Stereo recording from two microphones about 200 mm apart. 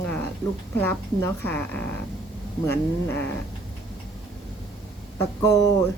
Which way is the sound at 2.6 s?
10° left (ahead or behind).